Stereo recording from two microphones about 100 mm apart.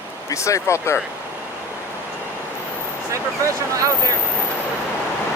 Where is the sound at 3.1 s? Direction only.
30° right (ahead or behind).